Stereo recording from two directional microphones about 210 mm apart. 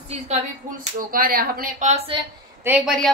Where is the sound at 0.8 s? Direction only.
40° right (ahead or behind).